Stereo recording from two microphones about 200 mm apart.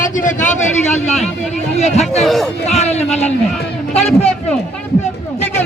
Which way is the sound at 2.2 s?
Centre (ahead or behind).